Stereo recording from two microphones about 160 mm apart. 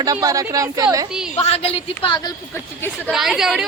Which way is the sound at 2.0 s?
30° left (ahead or behind).